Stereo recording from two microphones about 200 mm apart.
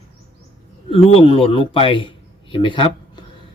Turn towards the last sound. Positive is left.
turn(degrees=25)  # may be behind; listen again after turning